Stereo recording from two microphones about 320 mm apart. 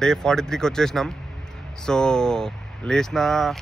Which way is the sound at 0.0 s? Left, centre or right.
Centre.